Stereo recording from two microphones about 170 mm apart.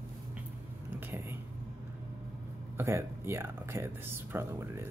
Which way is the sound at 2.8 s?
15° right (ahead or behind).